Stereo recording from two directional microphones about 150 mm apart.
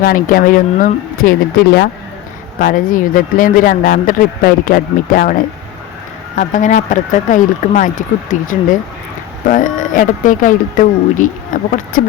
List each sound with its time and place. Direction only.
0.0 s speech: 75° left (ahead or behind)
2.6 s speech: 65° left (ahead or behind)
6.3 s speech: 60° left (ahead or behind)